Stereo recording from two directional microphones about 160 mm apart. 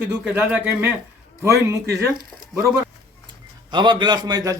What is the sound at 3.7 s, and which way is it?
Speech, 30° right (ahead or behind).